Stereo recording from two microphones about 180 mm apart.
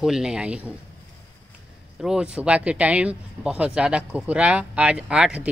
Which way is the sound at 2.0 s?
5° right (ahead or behind).